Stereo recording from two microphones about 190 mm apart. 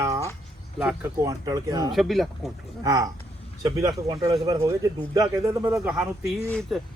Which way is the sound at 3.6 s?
20° right (ahead or behind).